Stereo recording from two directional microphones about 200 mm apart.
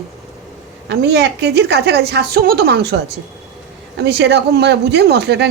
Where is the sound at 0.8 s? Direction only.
60° right (ahead or behind).